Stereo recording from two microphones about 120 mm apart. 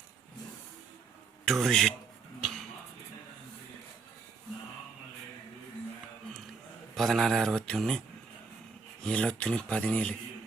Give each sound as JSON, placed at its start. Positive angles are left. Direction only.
{"t": 1.5, "sound": "a man's voice", "side_deg": 0}
{"t": 2.4, "sound": "music", "side_deg": 0}
{"t": 6.9, "sound": "a man's voice", "side_deg": 0}
{"t": 9.0, "sound": "speech", "side_deg": 10}